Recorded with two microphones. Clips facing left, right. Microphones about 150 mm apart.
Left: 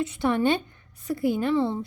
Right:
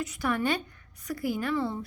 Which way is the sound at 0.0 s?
25° left (ahead or behind).